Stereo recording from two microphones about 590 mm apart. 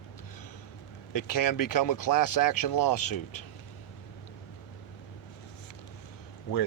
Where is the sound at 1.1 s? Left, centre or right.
Left.